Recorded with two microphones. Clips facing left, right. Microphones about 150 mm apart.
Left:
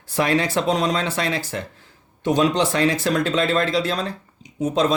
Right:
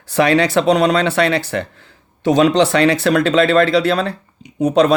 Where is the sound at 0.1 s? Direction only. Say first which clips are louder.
Right 6 dB; 75° right (ahead or behind).